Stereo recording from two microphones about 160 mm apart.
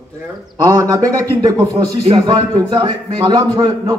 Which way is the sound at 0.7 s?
20° right (ahead or behind).